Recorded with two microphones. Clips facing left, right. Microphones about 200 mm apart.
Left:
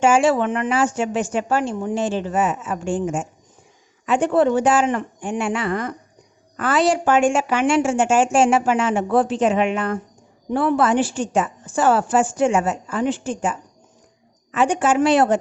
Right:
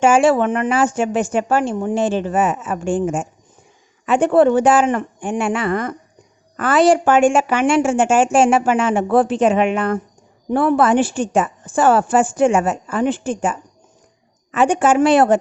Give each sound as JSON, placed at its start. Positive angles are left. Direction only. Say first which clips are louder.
{"t": 0.0, "sound": "a woman's voice", "louder": "right 3 dB", "side_deg": -55}